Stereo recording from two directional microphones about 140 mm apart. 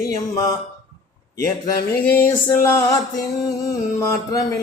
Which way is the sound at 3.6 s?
25° left (ahead or behind).